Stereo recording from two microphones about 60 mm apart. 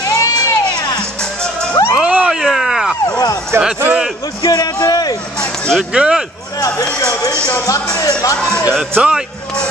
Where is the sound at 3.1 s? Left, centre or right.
Left.